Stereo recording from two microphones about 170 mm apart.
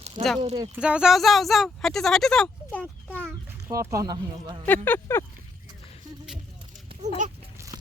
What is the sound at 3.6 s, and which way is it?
Speech, 15° right (ahead or behind).